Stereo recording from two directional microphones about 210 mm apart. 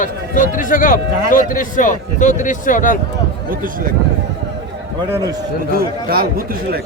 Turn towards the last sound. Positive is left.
turn(degrees=-45)  # may be behind; listen again after turning